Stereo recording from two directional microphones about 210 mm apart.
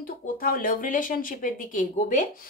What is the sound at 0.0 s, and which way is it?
Speech, 45° left (ahead or behind).